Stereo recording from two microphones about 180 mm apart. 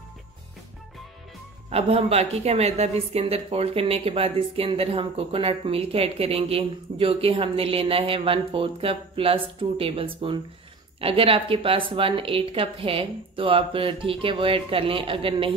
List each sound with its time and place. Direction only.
1.7 s a woman's voice: 35° right (ahead or behind)